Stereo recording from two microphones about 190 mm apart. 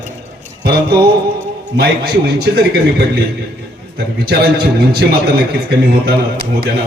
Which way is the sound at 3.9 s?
55° right (ahead or behind).